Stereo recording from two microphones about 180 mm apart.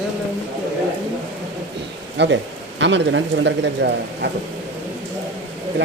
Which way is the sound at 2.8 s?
85° right.